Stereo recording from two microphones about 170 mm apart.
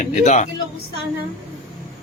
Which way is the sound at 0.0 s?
45° left (ahead or behind).